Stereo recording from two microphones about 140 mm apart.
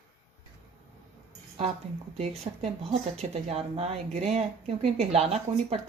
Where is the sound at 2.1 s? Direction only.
50° right (ahead or behind).